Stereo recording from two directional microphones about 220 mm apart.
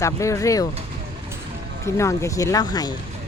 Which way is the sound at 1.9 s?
15° left (ahead or behind).